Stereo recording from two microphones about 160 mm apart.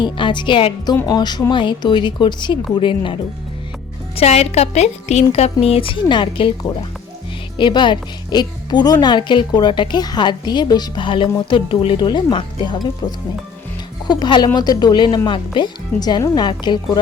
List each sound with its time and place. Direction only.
0.0 s speech: 30° left (ahead or behind)
4.2 s speech: 40° left (ahead or behind)